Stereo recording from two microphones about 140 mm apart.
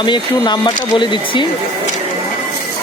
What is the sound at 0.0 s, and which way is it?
Speech, 30° left (ahead or behind).